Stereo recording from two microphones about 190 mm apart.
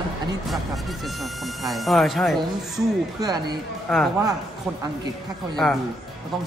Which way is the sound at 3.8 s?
Centre (ahead or behind).